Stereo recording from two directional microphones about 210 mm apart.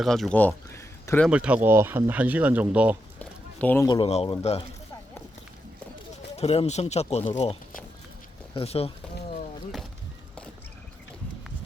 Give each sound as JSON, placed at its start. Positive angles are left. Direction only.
{"t": 0.0, "sound": "speech", "side_deg": 0}
{"t": 1.3, "sound": "speech", "side_deg": -5}
{"t": 3.2, "sound": "a sound", "side_deg": 10}
{"t": 3.8, "sound": "speech", "side_deg": 25}
{"t": 6.3, "sound": "speech", "side_deg": 30}